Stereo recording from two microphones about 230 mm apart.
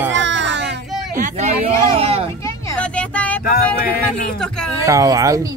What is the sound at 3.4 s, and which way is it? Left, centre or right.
Speech, left.